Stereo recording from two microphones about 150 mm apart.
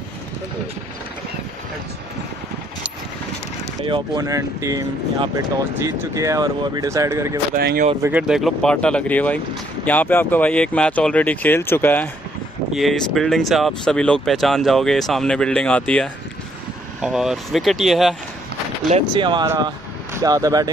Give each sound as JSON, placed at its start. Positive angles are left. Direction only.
{"t": 3.8, "sound": "speech", "side_deg": -30}
{"t": 7.5, "sound": "speech", "side_deg": -90}
{"t": 8.0, "sound": "speech", "side_deg": -10}
{"t": 12.7, "sound": "speech", "side_deg": 0}
{"t": 17.0, "sound": "speech", "side_deg": -5}
{"t": 19.1, "sound": "speech", "side_deg": -30}